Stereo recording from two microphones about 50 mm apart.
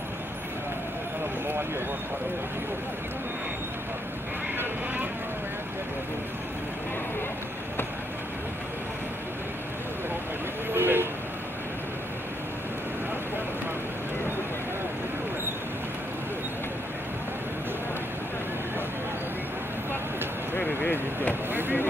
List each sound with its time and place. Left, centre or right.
10.7 s vehicle: right
20.5 s a sound: left
21.5 s vehicle: right